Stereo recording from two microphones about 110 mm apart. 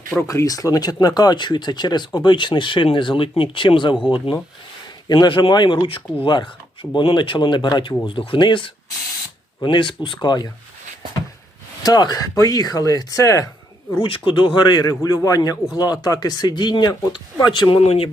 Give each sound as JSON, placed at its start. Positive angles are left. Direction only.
{"t": 0.3, "sound": "speech", "side_deg": 30}
{"t": 11.8, "sound": "a man's voice", "side_deg": 35}
{"t": 14.0, "sound": "a man's voice", "side_deg": 50}